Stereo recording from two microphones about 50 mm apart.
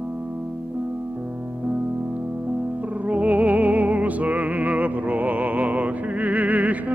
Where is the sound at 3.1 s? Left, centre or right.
Right.